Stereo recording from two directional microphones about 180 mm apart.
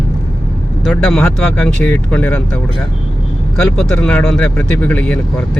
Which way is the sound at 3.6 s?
5° left (ahead or behind).